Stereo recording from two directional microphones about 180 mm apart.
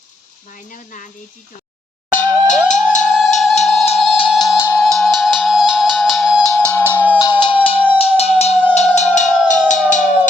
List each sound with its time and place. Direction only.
0.5 s speech: 50° left (ahead or behind)
2.0 s music: 45° left (ahead or behind); by 4.8 s 15° left (ahead or behind)
4.8 s music: centre (ahead or behind)
7.2 s music: 25° left (ahead or behind); by 10.0 s 45° left (ahead or behind)